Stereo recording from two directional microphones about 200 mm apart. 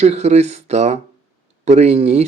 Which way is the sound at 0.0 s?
35° right (ahead or behind).